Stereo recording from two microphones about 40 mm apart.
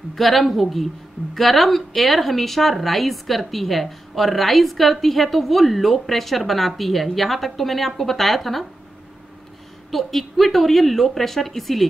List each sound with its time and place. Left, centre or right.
0.1 s speech: centre
9.8 s speech: centre